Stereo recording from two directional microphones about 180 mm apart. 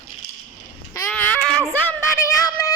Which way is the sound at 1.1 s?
10° left (ahead or behind).